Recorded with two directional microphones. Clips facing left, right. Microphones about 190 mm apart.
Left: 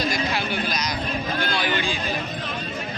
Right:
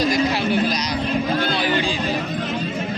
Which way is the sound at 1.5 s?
35° right (ahead or behind).